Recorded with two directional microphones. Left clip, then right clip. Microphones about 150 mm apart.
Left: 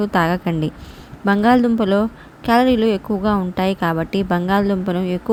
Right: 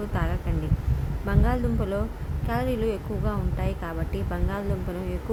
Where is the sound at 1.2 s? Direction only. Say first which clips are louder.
Left 14 dB; 60° left (ahead or behind).